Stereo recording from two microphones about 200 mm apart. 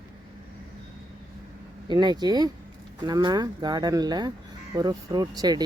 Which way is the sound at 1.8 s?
20° right (ahead or behind).